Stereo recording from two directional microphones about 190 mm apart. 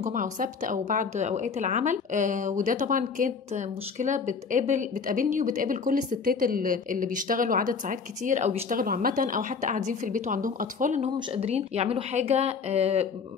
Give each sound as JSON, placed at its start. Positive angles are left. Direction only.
{"t": 0.0, "sound": "a woman's voice", "side_deg": -45}